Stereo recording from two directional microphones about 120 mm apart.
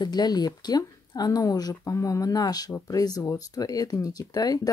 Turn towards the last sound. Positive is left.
turn(degrees=30)  # may be behind; listen again after turning